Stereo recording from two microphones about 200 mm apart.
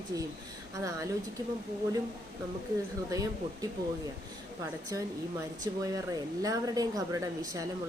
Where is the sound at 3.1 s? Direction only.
15° right (ahead or behind).